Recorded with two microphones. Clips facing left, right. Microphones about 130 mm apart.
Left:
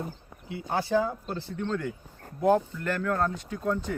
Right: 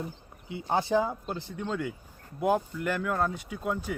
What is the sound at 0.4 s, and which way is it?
Speech, 20° right (ahead or behind).